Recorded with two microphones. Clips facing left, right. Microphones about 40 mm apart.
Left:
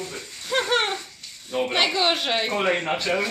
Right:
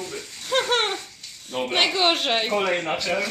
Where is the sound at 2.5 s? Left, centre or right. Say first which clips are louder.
Left 2 dB; left.